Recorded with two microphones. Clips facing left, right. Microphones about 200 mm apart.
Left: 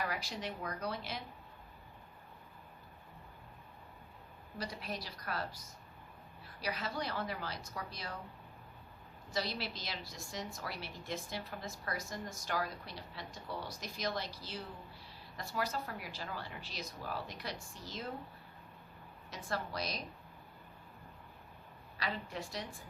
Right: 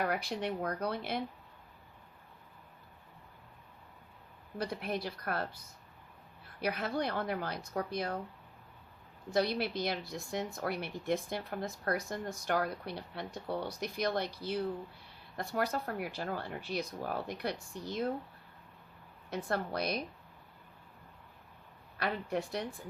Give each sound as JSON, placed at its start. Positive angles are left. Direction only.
{"t": 0.0, "sound": "speech", "side_deg": -55}
{"t": 4.5, "sound": "speech", "side_deg": -55}
{"t": 6.6, "sound": "speech", "side_deg": -55}
{"t": 9.3, "sound": "speech", "side_deg": -55}
{"t": 19.3, "sound": "speech", "side_deg": -55}
{"t": 21.9, "sound": "speech", "side_deg": -55}